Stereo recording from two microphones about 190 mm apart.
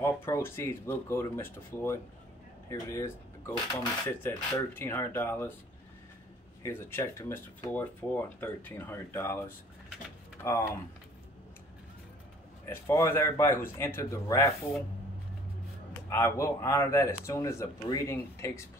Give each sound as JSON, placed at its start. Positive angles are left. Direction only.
{"t": 0.0, "sound": "speech", "side_deg": 15}
{"t": 6.6, "sound": "speech", "side_deg": 15}
{"t": 10.4, "sound": "speech", "side_deg": 10}
{"t": 12.6, "sound": "speech", "side_deg": 10}
{"t": 16.1, "sound": "speech", "side_deg": 15}